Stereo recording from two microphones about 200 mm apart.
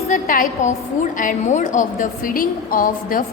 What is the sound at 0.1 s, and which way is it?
A woman's voice, 40° left (ahead or behind).